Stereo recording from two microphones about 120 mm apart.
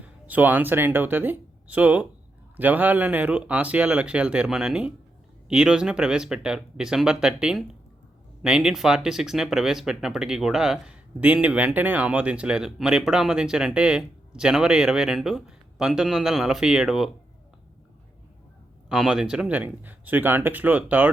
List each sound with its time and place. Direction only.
0.0 s speech: 15° right (ahead or behind)
18.9 s speech: 5° right (ahead or behind)